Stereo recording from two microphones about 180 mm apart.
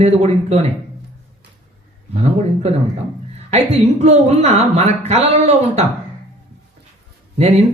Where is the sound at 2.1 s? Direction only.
35° right (ahead or behind).